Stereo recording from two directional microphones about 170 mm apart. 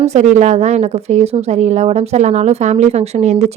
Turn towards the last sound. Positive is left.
turn(degrees=-40)  # may be behind; listen again after turning